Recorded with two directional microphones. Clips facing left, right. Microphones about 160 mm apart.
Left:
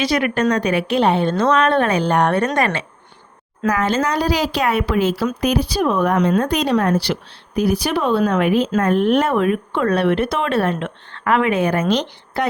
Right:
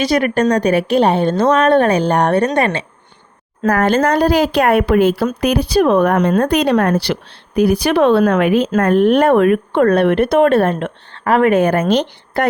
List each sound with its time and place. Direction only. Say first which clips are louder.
0.0 s a woman's voice: right 3 dB; 40° right (ahead or behind)
3.6 s speech: right 5 dB; 55° right (ahead or behind); by 8.6 s 75° right (ahead or behind)
8.7 s speech: right 4 dB; 60° right (ahead or behind)
11.1 s speech: right 5 dB; 35° right (ahead or behind); by 12.5 s 55° right (ahead or behind)